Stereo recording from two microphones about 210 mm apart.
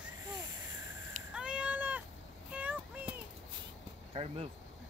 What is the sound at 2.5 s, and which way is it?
Child singing, 5° right (ahead or behind).